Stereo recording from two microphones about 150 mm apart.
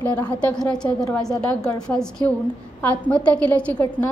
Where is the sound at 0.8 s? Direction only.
25° left (ahead or behind).